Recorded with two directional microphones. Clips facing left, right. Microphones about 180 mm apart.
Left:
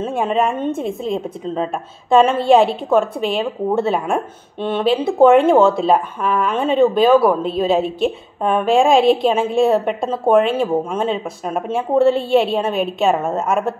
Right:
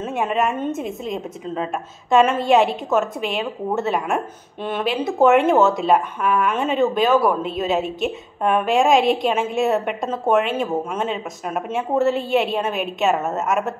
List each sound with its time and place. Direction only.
0.0 s a woman's voice: 30° left (ahead or behind)